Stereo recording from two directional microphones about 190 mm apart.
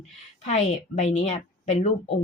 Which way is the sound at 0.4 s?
35° left (ahead or behind).